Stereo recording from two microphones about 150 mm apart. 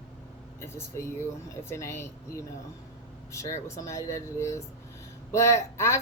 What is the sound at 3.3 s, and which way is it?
A woman's voice, 20° left (ahead or behind).